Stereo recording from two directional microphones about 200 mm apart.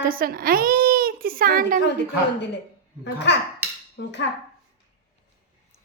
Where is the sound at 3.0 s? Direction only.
60° left (ahead or behind).